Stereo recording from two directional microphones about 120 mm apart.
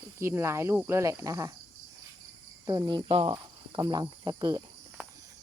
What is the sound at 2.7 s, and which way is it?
Cricket, 35° right (ahead or behind).